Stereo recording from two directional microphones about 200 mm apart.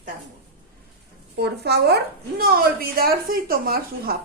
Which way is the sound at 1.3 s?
55° right (ahead or behind).